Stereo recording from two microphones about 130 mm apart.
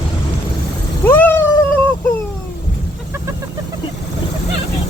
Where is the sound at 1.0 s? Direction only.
15° left (ahead or behind).